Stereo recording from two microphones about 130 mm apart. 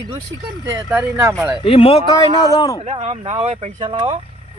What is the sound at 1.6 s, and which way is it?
Speech, 45° left (ahead or behind).